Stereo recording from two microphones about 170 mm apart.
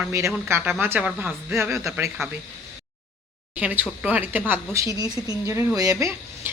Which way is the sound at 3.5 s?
10° right (ahead or behind).